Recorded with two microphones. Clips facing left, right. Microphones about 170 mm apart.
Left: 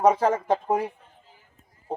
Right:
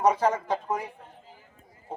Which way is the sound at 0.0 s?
50° left (ahead or behind).